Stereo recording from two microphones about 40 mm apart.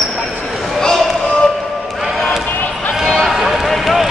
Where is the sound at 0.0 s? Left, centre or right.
Centre.